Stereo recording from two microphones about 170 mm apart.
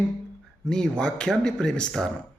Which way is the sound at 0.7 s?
5° left (ahead or behind).